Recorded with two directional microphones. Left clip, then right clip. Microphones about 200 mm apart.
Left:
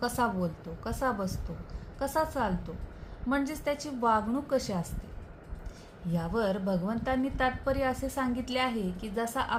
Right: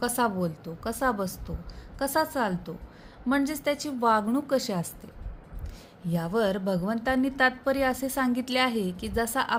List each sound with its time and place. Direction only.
0.0 s a woman's voice: 35° right (ahead or behind)
6.1 s a woman's voice: 35° right (ahead or behind)